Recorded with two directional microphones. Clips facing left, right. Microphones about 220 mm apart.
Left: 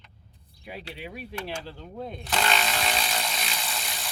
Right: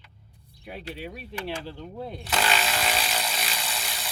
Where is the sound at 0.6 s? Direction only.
Centre (ahead or behind).